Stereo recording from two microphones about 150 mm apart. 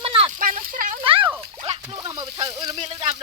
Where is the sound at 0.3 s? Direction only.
65° right (ahead or behind).